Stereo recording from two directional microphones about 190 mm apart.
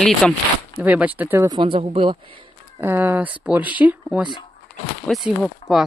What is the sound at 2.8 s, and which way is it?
Speech, 10° right (ahead or behind).